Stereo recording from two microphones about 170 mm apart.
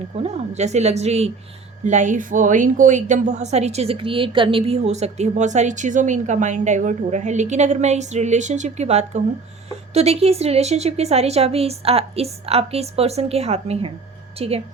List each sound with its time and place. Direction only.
0.2 s a woman's voice: 40° right (ahead or behind)